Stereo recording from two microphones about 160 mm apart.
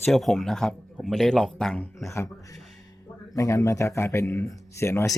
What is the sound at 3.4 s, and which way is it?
Speech, 20° left (ahead or behind).